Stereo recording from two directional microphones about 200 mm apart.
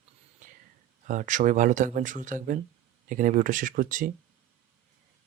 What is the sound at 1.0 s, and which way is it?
Speech, 40° right (ahead or behind).